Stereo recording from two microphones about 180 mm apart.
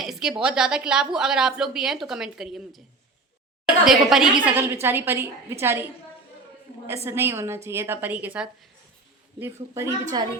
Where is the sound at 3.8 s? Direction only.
Centre (ahead or behind); by 10.2 s 15° right (ahead or behind).